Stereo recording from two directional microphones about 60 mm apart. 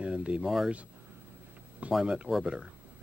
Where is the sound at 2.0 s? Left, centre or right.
Centre.